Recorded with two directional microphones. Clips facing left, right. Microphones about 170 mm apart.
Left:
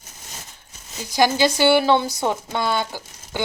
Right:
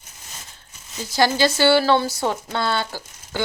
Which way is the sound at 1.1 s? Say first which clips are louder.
Left 1 dB; 15° left (ahead or behind).